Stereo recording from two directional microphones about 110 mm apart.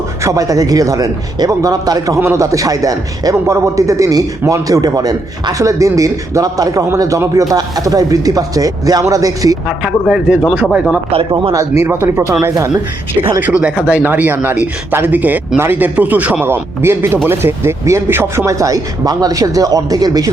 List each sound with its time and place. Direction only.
0.2 s a man's voice: 30° right (ahead or behind)
9.6 s a man's voice: 5° right (ahead or behind)
11.1 s speech: 60° right (ahead or behind)
11.9 s speech: 25° right (ahead or behind)
13.4 s a man's voice: 10° right (ahead or behind); by 20.3 s 35° right (ahead or behind)